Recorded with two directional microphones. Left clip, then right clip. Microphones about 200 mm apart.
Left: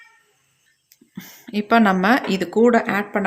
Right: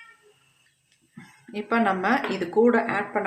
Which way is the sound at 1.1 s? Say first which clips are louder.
Left 7 dB; 50° left (ahead or behind).